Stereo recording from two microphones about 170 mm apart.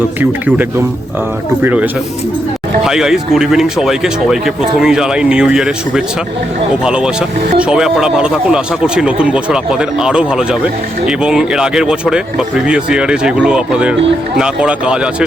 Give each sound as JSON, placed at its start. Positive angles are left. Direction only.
{"t": 0.2, "sound": "speech", "side_deg": -10}